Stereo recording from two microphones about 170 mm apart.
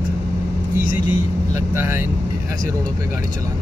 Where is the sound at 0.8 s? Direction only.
45° left (ahead or behind).